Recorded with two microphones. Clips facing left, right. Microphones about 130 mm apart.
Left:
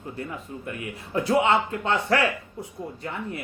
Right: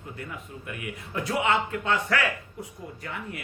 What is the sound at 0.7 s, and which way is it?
Speech, 30° left (ahead or behind).